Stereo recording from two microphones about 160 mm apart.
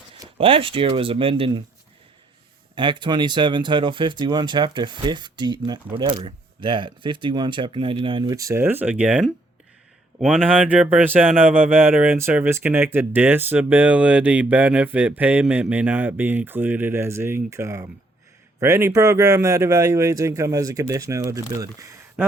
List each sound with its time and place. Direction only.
0.3 s speech: 35° right (ahead or behind)
2.7 s speech: 30° right (ahead or behind)